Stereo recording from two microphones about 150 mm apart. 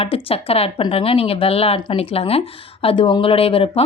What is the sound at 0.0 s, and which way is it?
A woman's voice, 40° left (ahead or behind).